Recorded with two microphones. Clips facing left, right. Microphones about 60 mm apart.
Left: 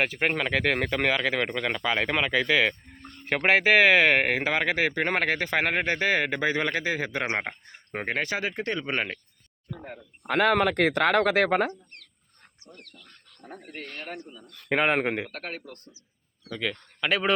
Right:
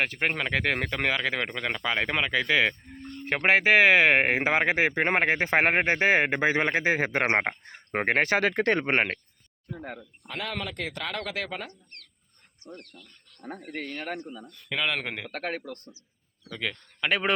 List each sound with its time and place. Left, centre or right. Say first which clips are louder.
0.0 s speech: left 2 dB; centre
4.2 s speech: right 1 dB; right
8.4 s speech: right 6 dB; right
8.9 s speech: right 4 dB; right
10.2 s speech: left 12 dB; left
14.7 s speech: left 6 dB; left
15.0 s a man's voice: left 7 dB; left
16.5 s speech: left 2 dB; centre